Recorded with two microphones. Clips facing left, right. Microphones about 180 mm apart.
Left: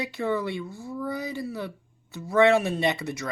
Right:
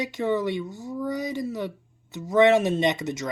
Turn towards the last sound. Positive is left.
turn(degrees=-20)  # may be behind; listen again after turning